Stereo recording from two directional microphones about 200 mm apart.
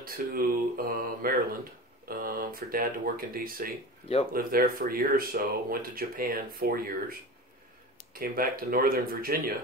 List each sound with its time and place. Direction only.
0.0 s speech: 45° right (ahead or behind)